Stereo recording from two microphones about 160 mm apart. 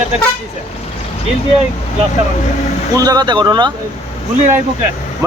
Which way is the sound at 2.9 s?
25° right (ahead or behind).